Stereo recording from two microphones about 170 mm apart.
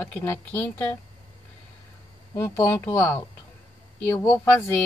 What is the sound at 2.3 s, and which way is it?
Speech, 15° left (ahead or behind).